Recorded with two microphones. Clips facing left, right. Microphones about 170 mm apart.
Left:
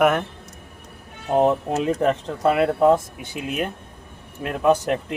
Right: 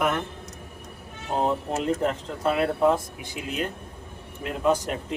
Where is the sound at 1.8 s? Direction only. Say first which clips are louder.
Left 5 dB; 70° left (ahead or behind).